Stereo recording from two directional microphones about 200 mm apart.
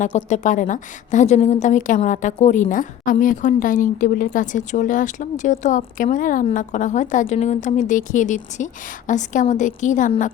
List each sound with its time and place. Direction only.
0.0 s a woman's voice: 40° left (ahead or behind)